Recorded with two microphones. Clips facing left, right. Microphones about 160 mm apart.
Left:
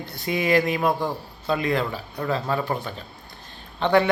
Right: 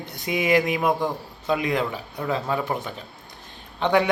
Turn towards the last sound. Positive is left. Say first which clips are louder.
# left 1 dB
turn(degrees=-15)  # may be behind; listen again after turning